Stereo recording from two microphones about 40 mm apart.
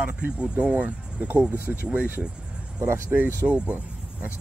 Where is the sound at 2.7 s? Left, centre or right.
Right.